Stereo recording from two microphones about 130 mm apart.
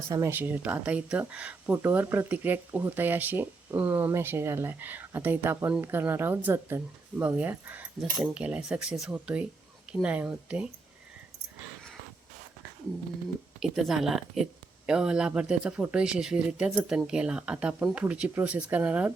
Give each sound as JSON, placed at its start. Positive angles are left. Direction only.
{"t": 0.1, "sound": "speech", "side_deg": -20}
{"t": 13.6, "sound": "speech", "side_deg": -5}